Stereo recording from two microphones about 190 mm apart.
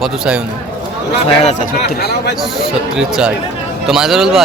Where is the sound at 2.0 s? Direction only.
60° left (ahead or behind).